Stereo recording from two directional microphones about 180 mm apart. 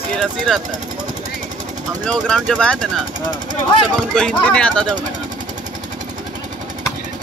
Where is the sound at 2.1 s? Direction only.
5° left (ahead or behind).